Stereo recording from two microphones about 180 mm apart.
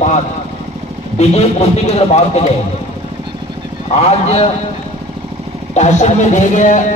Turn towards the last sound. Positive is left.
turn(degrees=45)  # may be behind; listen again after turning